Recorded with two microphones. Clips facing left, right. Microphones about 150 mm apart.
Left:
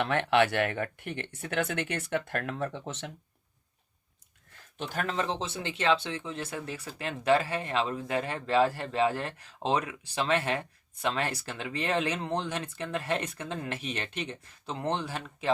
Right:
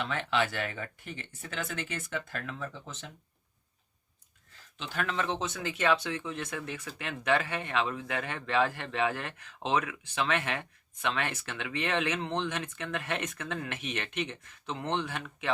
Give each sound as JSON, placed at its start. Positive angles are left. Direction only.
{"t": 0.0, "sound": "speech", "side_deg": 60}
{"t": 4.8, "sound": "speech", "side_deg": 45}